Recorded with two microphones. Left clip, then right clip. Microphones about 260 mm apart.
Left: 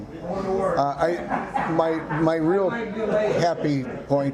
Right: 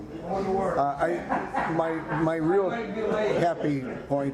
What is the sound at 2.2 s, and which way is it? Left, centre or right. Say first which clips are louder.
A man's voice: left 3 dB; left.